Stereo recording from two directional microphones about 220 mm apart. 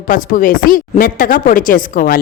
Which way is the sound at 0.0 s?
35° left (ahead or behind).